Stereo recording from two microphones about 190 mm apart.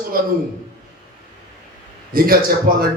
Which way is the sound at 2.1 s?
50° right (ahead or behind).